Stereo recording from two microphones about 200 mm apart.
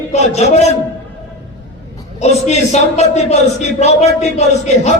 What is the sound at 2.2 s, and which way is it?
A man's voice, 35° left (ahead or behind).